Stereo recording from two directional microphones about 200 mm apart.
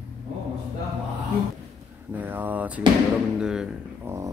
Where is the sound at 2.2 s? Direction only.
10° right (ahead or behind).